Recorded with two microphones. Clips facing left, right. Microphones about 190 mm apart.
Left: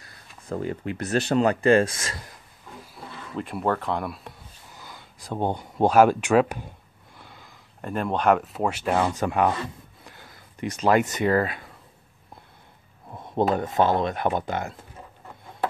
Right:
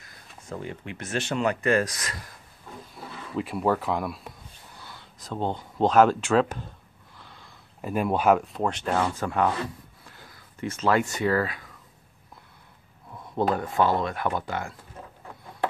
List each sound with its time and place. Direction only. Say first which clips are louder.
0.0 s speech: even; 35° left (ahead or behind)
2.8 s speech: even; centre (ahead or behind)
4.7 s speech: left 3 dB; 10° left (ahead or behind)
7.8 s speech: even; 10° right (ahead or behind); by 9.5 s 15° left (ahead or behind)
10.6 s speech: left 3 dB; 15° left (ahead or behind)
13.1 s a sound: left 3 dB; 25° left (ahead or behind)
13.6 s speech: left 2 dB; 20° left (ahead or behind)